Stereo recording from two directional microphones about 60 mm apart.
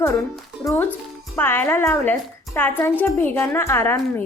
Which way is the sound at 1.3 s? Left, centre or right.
Left.